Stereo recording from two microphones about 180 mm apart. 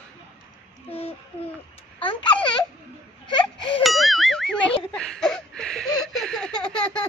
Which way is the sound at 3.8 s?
Centre (ahead or behind).